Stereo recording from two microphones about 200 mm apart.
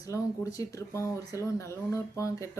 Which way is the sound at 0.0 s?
15° left (ahead or behind).